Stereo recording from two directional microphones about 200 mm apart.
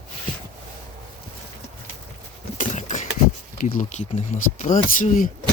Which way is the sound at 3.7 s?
40° left (ahead or behind).